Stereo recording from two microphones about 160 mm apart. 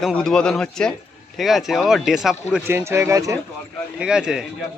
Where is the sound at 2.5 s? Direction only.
15° right (ahead or behind).